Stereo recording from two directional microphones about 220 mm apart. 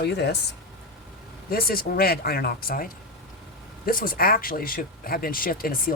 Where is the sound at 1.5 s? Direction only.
40° left (ahead or behind).